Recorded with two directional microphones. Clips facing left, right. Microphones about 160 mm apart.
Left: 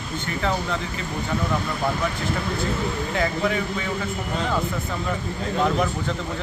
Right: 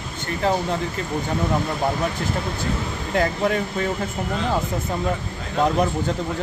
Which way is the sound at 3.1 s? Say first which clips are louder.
Right 4 dB; 45° right (ahead or behind).